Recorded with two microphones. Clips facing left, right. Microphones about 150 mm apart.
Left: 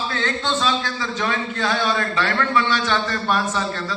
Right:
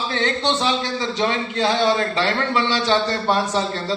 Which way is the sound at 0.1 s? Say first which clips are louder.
Right 5 dB; 20° right (ahead or behind).